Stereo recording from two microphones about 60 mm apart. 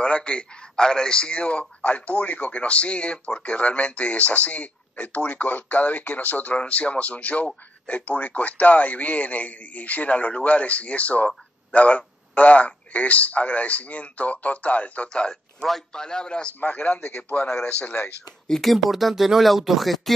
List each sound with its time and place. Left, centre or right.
0.0 s a man's voice: centre
15.6 s a man's voice: centre
16.5 s a man's voice: left
18.5 s speech: centre